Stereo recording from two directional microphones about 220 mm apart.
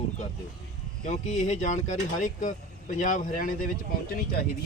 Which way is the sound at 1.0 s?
30° left (ahead or behind).